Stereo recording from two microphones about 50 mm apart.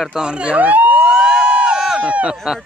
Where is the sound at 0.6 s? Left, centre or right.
Right.